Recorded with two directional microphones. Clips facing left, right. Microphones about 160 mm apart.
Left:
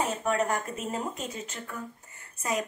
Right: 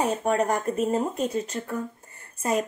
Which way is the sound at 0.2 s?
35° right (ahead or behind).